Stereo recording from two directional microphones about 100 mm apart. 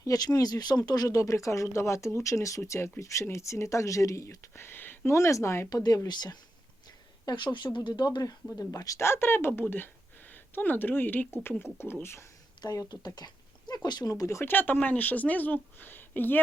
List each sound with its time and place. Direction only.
0.0 s speech: 40° left (ahead or behind)
5.7 s speech: 40° left (ahead or behind)
6.8 s a sound: 45° left (ahead or behind)
7.9 s speech: 45° left (ahead or behind); by 12.3 s 25° left (ahead or behind)
12.6 s speech: 40° left (ahead or behind); by 16.4 s 20° left (ahead or behind)